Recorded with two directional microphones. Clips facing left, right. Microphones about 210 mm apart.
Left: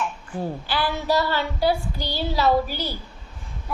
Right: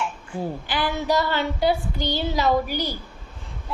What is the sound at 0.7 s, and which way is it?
A woman's voice, 15° right (ahead or behind).